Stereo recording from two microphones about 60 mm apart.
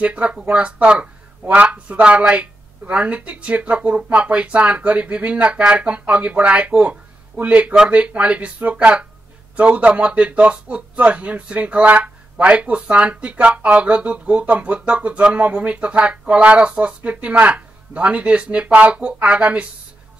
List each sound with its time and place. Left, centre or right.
0.0 s speech: right